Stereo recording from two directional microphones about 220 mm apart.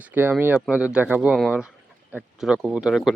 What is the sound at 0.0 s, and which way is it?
Speech, 10° right (ahead or behind).